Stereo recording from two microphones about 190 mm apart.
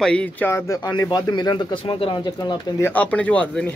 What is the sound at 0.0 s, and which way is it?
Speech, 5° left (ahead or behind).